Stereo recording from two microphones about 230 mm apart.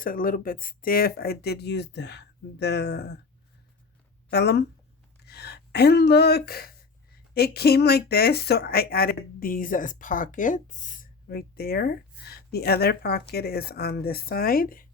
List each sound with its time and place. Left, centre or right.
0.0 s speech: left
4.3 s speech: left